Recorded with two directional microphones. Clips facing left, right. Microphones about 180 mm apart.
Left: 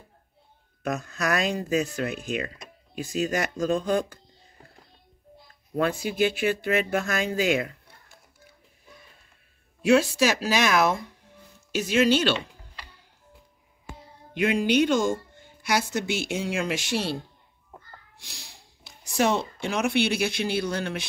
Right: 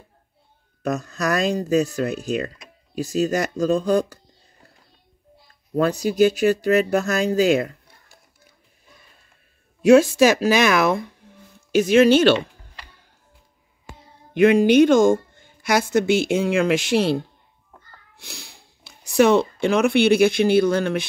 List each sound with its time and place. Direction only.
0.8 s speech: 40° right (ahead or behind)
5.8 s speech: 40° right (ahead or behind)
9.8 s speech: 45° right (ahead or behind)
14.3 s a woman's voice: 50° right (ahead or behind)
18.2 s speech: 60° right (ahead or behind)